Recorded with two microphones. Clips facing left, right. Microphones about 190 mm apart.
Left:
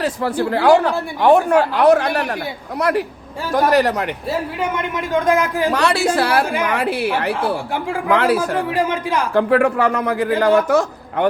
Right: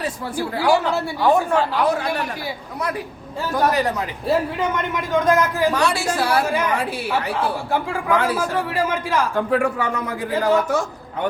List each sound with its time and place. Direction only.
0.0 s speech: 65° left (ahead or behind)
5.2 s a man's voice: 15° left (ahead or behind)
5.7 s speech: 65° left (ahead or behind)
8.7 s a man's voice: 15° left (ahead or behind)
9.3 s speech: 75° left (ahead or behind)